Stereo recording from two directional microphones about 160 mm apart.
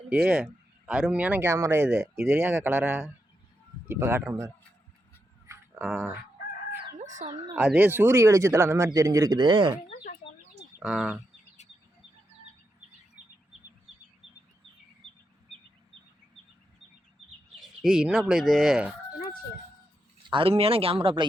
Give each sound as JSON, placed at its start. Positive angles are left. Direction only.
{"t": 0.1, "sound": "speech", "side_deg": -10}
{"t": 7.5, "sound": "speech", "side_deg": -10}
{"t": 10.8, "sound": "speech", "side_deg": 0}
{"t": 17.6, "sound": "speech", "side_deg": -5}
{"t": 20.3, "sound": "speech", "side_deg": -35}